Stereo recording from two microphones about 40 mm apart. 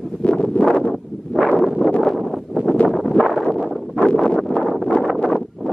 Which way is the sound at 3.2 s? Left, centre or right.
Left.